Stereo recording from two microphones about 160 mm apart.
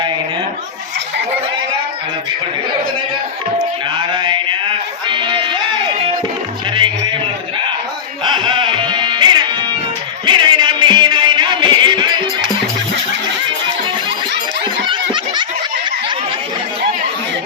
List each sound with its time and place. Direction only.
4.1 s mantra: 30° right (ahead or behind)
5.0 s music: 30° right (ahead or behind)
8.2 s music: 30° right (ahead or behind)
14.6 s a sound: 30° right (ahead or behind)